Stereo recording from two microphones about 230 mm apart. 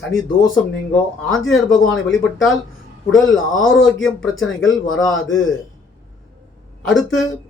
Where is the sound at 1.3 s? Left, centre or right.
Centre.